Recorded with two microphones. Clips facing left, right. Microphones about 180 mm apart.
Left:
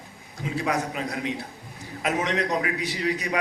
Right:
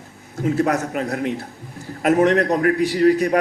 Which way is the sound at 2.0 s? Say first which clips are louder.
Right 11 dB; 60° right (ahead or behind).